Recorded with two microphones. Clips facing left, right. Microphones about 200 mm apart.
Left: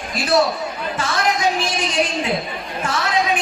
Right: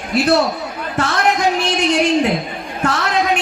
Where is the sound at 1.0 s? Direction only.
65° right (ahead or behind).